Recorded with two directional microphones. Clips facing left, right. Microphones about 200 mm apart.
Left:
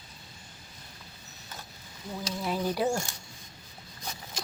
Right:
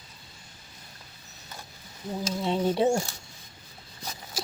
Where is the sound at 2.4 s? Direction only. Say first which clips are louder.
Right 4 dB; 25° right (ahead or behind).